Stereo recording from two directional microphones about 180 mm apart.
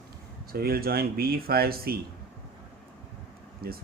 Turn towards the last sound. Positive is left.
turn(degrees=-60)  # may be behind; listen again after turning